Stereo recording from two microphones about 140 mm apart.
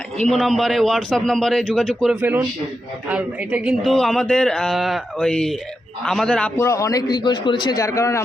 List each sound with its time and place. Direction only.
0.3 s a man's voice: centre (ahead or behind)
3.1 s a man's voice: 10° right (ahead or behind)
6.6 s a man's voice: 20° left (ahead or behind)
7.8 s a man's voice: 20° left (ahead or behind)